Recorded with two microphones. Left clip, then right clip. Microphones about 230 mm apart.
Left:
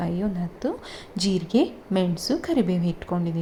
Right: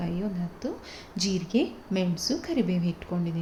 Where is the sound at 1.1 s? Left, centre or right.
Centre.